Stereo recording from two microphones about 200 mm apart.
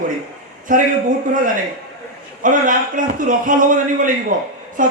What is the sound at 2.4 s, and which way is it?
A man's voice, 40° right (ahead or behind).